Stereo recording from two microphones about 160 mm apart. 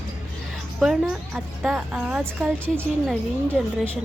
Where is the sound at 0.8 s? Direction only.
5° right (ahead or behind).